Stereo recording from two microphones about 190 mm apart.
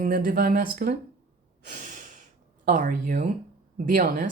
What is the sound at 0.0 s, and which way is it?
Speech, 50° right (ahead or behind).